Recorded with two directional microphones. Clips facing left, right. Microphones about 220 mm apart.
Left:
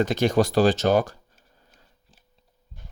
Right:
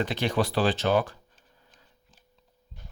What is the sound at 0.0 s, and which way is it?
Speech, 45° left (ahead or behind).